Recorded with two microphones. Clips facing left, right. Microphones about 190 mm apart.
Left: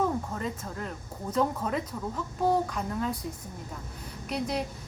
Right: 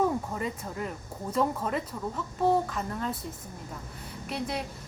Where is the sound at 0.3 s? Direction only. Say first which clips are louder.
Right 1 dB; 5° right (ahead or behind).